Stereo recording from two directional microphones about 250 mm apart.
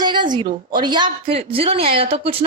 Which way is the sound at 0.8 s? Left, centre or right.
Centre.